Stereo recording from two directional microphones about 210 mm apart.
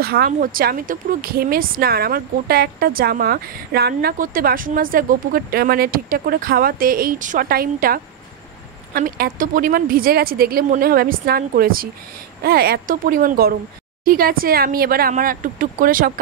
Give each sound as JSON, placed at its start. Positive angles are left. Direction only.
{"t": 0.0, "sound": "speech", "side_deg": -45}